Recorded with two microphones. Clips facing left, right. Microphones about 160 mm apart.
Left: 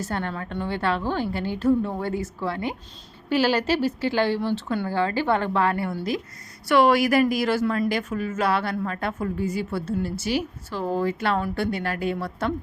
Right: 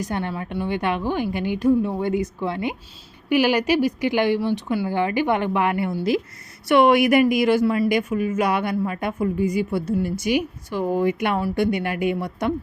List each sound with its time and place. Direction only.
0.0 s speech: 15° right (ahead or behind)